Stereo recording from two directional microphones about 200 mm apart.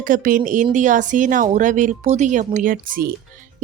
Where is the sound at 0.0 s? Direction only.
40° right (ahead or behind).